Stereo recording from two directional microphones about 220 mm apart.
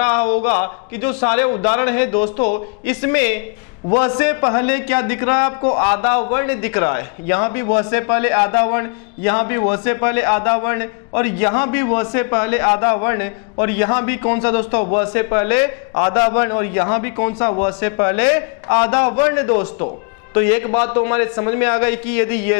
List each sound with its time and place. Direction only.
0.0 s a man's voice: 20° left (ahead or behind)
0.9 s a man's voice: 15° left (ahead or behind)
2.1 s speech: 30° left (ahead or behind)
3.0 s a man's voice: 15° left (ahead or behind)
5.6 s a man's voice: 30° left (ahead or behind)
5.9 s a man's voice: 20° left (ahead or behind)